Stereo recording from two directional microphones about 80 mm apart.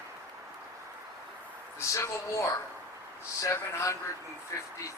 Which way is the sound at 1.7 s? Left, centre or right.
Left.